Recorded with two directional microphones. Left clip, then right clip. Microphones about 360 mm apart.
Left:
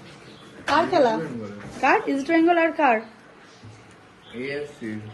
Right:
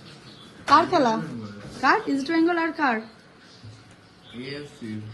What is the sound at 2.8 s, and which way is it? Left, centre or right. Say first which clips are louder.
Speech: left 4 dB; centre.